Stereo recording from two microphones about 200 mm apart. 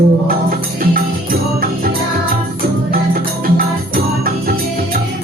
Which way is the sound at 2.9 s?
45° right (ahead or behind).